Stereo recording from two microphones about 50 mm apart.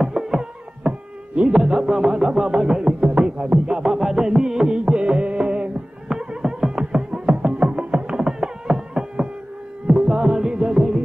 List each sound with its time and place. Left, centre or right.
0.0 s music: centre